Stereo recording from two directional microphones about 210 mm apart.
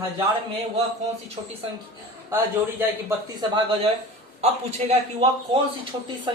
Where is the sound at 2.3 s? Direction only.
10° right (ahead or behind).